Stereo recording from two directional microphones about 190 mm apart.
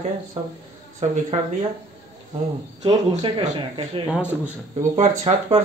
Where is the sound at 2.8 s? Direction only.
25° right (ahead or behind).